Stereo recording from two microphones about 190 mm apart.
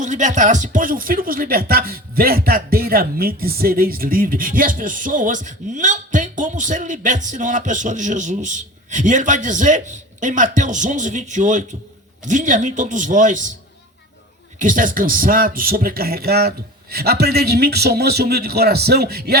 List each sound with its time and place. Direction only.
0.0 s speech: 40° right (ahead or behind)
14.6 s speech: 45° right (ahead or behind)